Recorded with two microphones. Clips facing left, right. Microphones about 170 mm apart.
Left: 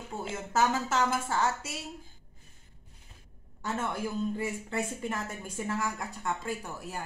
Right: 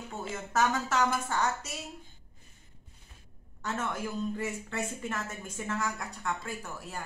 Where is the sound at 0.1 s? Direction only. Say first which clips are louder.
Left 2 dB; 25° left (ahead or behind).